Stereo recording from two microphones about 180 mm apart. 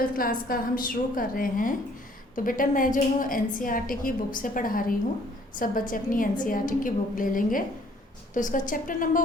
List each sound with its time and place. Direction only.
0.0 s a woman's voice: 50° left (ahead or behind)